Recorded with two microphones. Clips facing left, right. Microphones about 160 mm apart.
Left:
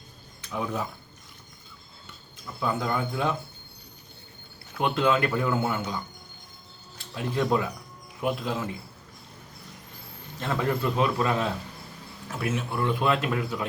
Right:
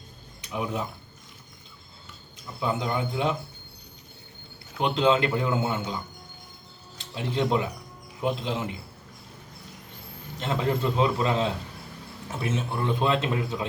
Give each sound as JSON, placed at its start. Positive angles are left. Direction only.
{"t": 0.4, "sound": "speech", "side_deg": -20}
{"t": 2.6, "sound": "a man's voice", "side_deg": -20}
{"t": 4.8, "sound": "a man's voice", "side_deg": -20}
{"t": 7.0, "sound": "a man's voice", "side_deg": -20}
{"t": 10.3, "sound": "a man's voice", "side_deg": -20}